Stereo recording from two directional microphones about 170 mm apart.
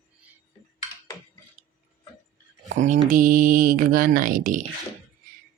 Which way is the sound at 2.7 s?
45° right (ahead or behind).